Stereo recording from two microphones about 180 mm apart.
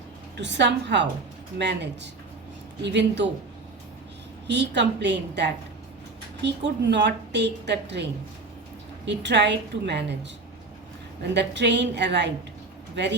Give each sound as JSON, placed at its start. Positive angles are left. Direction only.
{"t": 0.3, "sound": "a woman's voice", "side_deg": -75}
{"t": 4.4, "sound": "a woman's voice", "side_deg": -70}
{"t": 9.0, "sound": "a woman's voice", "side_deg": -75}
{"t": 11.2, "sound": "a woman's voice", "side_deg": -70}